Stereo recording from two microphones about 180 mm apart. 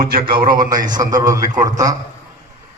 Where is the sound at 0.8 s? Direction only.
20° right (ahead or behind).